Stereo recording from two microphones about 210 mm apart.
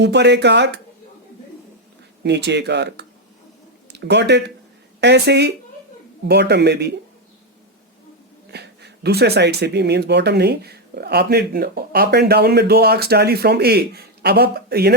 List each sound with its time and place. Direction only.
0.0 s speech: 55° right (ahead or behind)
2.2 s speech: 55° right (ahead or behind)
8.4 s speech: 50° right (ahead or behind)